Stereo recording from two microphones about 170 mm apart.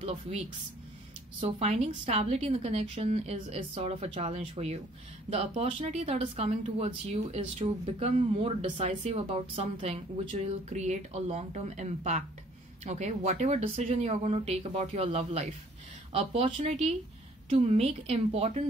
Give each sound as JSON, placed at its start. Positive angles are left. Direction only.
{"t": 0.0, "sound": "speech", "side_deg": -40}
{"t": 1.4, "sound": "speech", "side_deg": -40}